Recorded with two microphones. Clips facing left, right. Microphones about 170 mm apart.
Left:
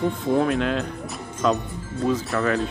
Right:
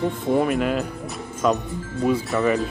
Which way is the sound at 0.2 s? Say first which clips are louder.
Right 2 dB; 5° right (ahead or behind).